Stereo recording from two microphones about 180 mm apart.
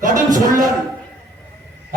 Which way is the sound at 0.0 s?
45° right (ahead or behind).